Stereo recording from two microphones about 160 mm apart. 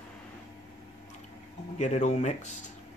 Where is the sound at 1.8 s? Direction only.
45° left (ahead or behind).